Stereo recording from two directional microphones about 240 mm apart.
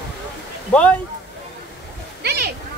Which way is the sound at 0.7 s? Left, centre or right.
Centre.